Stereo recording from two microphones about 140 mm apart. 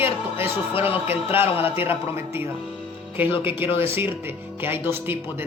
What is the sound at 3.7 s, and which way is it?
Speech, 15° right (ahead or behind).